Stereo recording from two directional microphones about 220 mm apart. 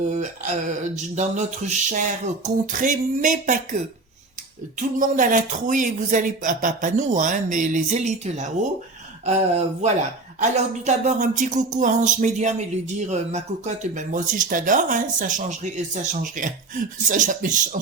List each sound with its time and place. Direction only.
0.1 s speech: 35° right (ahead or behind)
4.8 s speech: 35° right (ahead or behind)